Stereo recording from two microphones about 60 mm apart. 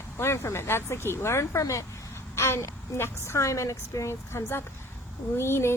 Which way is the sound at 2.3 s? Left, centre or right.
Left.